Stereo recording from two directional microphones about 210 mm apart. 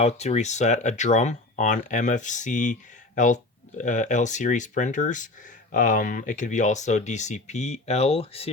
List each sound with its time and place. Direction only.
0.0 s speech: 30° left (ahead or behind)